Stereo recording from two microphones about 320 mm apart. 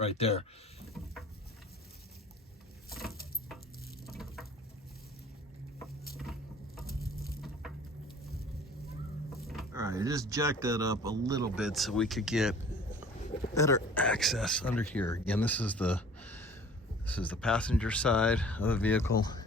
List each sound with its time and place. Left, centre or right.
0.0 s speech: centre
2.9 s a sound: centre
9.3 s speech: centre
13.5 s speech: centre